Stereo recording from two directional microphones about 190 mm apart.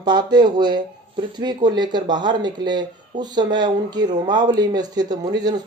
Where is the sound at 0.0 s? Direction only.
20° right (ahead or behind).